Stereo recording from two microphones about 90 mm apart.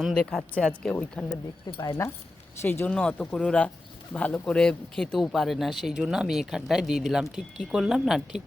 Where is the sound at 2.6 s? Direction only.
25° left (ahead or behind).